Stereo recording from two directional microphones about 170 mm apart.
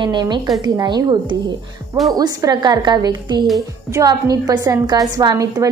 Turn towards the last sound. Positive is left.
turn(degrees=-20)  # may be behind; listen again after turning